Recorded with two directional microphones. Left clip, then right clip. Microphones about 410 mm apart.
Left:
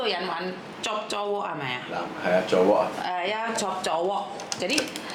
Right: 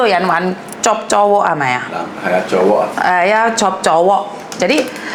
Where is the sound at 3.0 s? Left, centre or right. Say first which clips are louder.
Right 16 dB; right.